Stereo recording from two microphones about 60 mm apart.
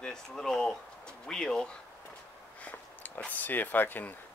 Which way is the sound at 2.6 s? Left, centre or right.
Left.